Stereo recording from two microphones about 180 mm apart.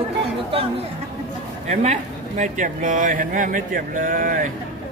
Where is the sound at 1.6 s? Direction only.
40° right (ahead or behind).